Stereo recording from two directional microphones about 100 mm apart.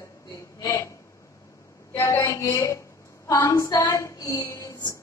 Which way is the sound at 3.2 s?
35° left (ahead or behind).